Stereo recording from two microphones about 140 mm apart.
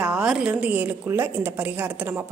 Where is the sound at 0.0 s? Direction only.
5° right (ahead or behind).